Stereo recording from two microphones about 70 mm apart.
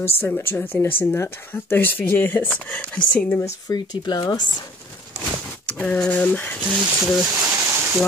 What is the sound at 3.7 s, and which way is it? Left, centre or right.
Speech, left.